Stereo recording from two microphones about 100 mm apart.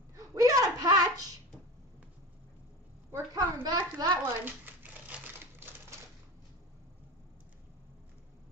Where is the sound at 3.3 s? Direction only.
40° right (ahead or behind).